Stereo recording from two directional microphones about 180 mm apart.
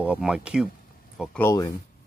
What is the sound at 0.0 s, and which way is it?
Speech, 5° right (ahead or behind).